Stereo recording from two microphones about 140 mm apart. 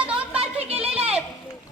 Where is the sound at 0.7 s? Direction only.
45° right (ahead or behind).